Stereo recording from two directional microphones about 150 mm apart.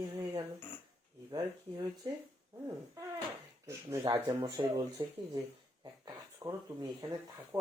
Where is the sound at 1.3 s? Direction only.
25° right (ahead or behind).